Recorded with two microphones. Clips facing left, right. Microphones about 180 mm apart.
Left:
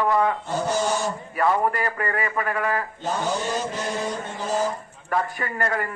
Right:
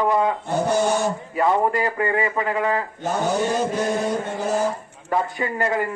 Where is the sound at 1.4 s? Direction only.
20° right (ahead or behind).